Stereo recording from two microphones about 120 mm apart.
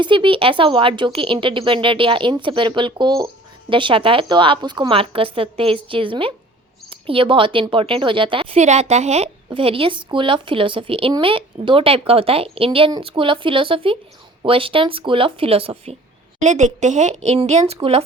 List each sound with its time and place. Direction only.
0.0 s a woman's voice: 45° right (ahead or behind); by 9.3 s 65° right (ahead or behind)
9.5 s a woman's voice: 50° right (ahead or behind)
16.4 s a woman's voice: 80° right
17.2 s a woman's voice: 60° right (ahead or behind)